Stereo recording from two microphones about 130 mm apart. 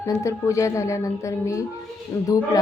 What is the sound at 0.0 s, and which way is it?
Speech, 25° left (ahead or behind).